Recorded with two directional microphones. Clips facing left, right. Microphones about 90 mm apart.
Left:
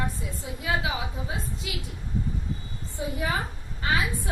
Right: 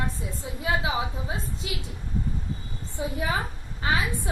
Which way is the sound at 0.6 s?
30° right (ahead or behind).